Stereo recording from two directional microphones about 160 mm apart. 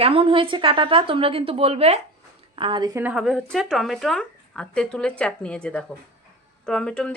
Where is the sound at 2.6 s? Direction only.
30° right (ahead or behind).